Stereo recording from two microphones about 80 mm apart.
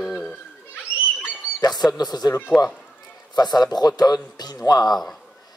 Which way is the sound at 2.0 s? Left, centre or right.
Left.